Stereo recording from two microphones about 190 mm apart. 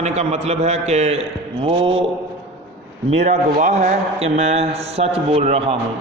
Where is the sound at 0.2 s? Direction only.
35° right (ahead or behind).